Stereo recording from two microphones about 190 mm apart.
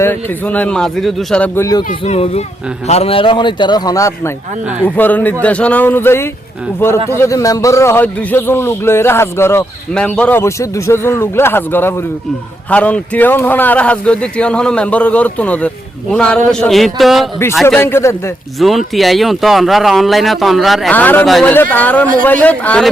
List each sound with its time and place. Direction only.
0.0 s a man's voice: 10° left (ahead or behind)
1.9 s a man's voice: 35° left (ahead or behind); by 17.7 s centre (ahead or behind)
17.7 s a man's voice: 10° left (ahead or behind)
18.6 s a man's voice: centre (ahead or behind)